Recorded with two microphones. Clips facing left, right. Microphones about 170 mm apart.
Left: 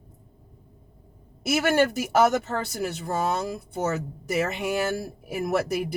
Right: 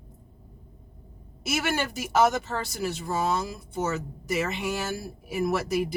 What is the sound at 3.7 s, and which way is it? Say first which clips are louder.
A woman's voice: even; 55° left (ahead or behind).